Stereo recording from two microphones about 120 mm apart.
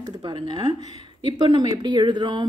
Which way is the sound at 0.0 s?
35° right (ahead or behind).